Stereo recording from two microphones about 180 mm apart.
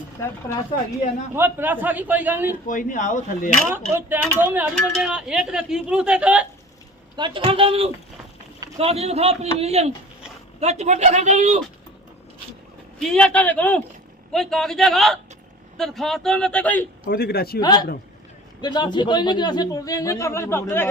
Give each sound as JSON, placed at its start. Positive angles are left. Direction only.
{"t": 1.4, "sound": "a man's voice", "side_deg": -10}
{"t": 2.6, "sound": "speech", "side_deg": 45}
{"t": 4.4, "sound": "speech", "side_deg": -10}
{"t": 7.2, "sound": "a man's voice", "side_deg": -25}
{"t": 13.0, "sound": "speech", "side_deg": 5}
{"t": 17.1, "sound": "a man's voice", "side_deg": 60}
{"t": 17.6, "sound": "speech", "side_deg": 20}